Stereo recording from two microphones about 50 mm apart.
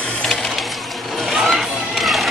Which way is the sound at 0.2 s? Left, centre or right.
Centre.